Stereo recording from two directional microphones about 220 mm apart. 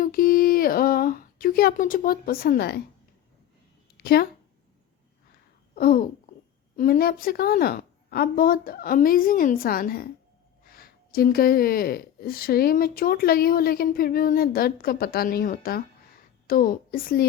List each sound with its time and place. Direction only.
0.0 s speech: 40° left (ahead or behind)
3.9 s a sound: 45° left (ahead or behind)
5.7 s babbling: 40° left (ahead or behind)
6.7 s a woman's voice: 40° left (ahead or behind)